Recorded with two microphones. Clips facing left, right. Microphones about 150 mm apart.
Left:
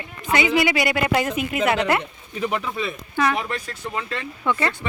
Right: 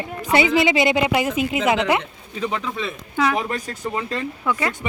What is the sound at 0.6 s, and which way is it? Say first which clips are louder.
Speech: right 3 dB; 25° right (ahead or behind).